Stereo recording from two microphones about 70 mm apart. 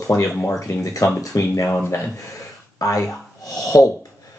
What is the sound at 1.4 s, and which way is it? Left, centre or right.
Speech, left.